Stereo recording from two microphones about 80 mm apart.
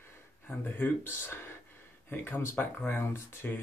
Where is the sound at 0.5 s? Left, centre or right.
Left.